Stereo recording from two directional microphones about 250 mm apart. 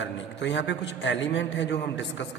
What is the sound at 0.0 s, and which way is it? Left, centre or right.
A man's voice, left.